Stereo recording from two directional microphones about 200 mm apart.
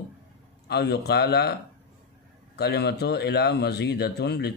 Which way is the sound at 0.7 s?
55° left (ahead or behind).